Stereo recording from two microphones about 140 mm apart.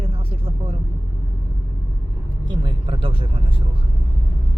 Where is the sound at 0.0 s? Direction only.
40° right (ahead or behind).